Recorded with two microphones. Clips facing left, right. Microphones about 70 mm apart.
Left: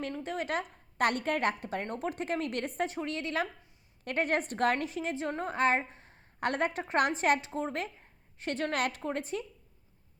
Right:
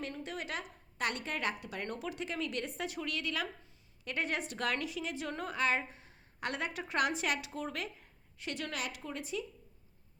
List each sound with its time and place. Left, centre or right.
0.0 s a woman's voice: left
2.9 s a woman's voice: left